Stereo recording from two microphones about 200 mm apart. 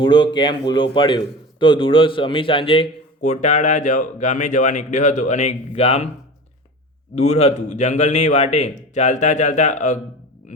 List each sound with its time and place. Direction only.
0.0 s a man's voice: 20° left (ahead or behind)
7.2 s a man's voice: 30° left (ahead or behind)